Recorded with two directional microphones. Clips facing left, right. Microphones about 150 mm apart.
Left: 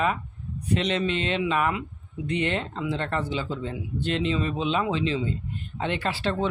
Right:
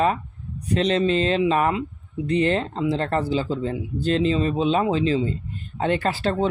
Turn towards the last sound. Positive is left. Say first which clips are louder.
# right 4 dB
turn(degrees=-40)  # may be behind; listen again after turning